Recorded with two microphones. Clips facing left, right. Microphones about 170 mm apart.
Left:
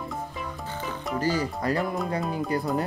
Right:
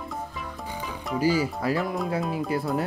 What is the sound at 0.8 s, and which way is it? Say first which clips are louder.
Speech: right 3 dB; 5° right (ahead or behind).